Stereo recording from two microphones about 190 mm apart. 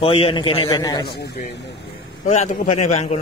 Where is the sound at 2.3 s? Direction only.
35° left (ahead or behind).